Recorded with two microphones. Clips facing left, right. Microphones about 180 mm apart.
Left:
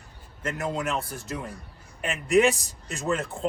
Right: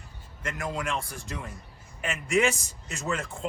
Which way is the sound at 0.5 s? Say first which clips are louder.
Left 3 dB; 40° left (ahead or behind).